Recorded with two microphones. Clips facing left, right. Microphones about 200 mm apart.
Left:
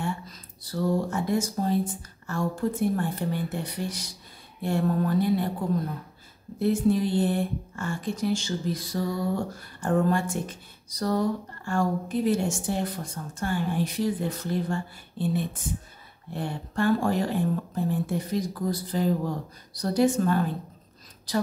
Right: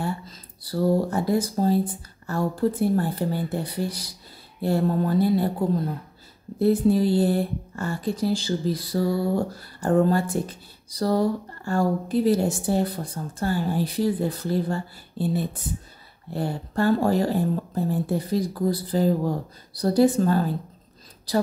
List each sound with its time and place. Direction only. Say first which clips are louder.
0.0 s speech: right 2 dB; 35° right (ahead or behind)
6.6 s speech: right 4 dB; 35° right (ahead or behind)